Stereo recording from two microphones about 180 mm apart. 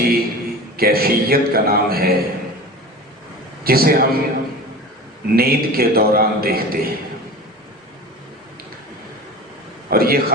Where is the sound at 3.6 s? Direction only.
55° right (ahead or behind).